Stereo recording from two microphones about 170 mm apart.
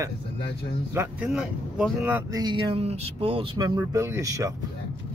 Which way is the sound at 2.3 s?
25° right (ahead or behind).